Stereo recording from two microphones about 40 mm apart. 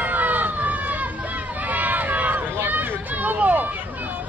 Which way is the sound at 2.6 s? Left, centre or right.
Right.